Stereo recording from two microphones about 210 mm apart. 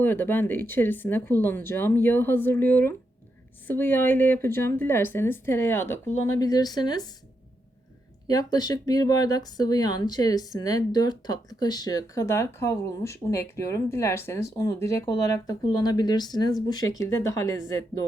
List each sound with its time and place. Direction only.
0.0 s speech: 10° left (ahead or behind)
8.3 s speech: 20° left (ahead or behind)